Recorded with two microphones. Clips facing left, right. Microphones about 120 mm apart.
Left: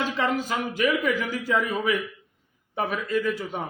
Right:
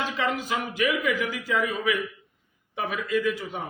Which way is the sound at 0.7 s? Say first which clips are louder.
Left 2 dB; 40° left (ahead or behind).